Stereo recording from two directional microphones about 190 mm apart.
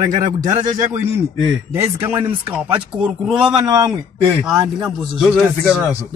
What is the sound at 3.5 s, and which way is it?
Speech, 20° right (ahead or behind).